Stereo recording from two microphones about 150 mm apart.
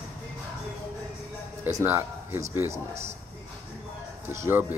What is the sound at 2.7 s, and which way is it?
Speech, 45° right (ahead or behind).